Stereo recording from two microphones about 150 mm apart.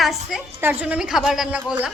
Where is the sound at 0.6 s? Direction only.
10° right (ahead or behind).